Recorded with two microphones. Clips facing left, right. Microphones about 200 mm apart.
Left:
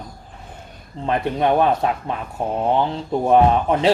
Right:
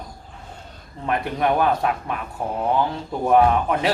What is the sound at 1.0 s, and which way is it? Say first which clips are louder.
Speech: left 3 dB; 25° left (ahead or behind).